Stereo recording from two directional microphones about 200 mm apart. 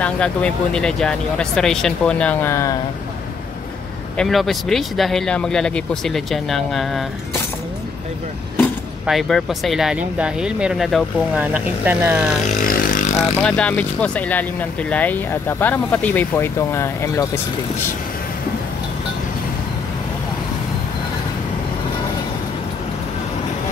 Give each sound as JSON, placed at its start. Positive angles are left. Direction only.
{"t": 0.0, "sound": "speech", "side_deg": 5}
{"t": 4.2, "sound": "speech", "side_deg": 0}
{"t": 9.0, "sound": "speech", "side_deg": 0}
{"t": 12.6, "sound": "vehicle", "side_deg": 45}
{"t": 13.4, "sound": "speech", "side_deg": 5}